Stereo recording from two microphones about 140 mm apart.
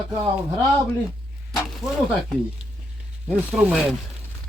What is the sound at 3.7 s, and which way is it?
Speech, 5° right (ahead or behind).